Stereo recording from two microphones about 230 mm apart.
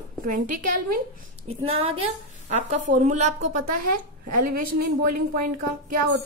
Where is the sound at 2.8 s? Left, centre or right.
Right.